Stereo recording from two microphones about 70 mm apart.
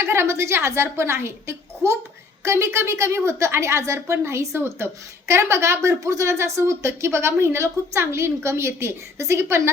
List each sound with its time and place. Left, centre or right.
0.0 s a woman's voice: right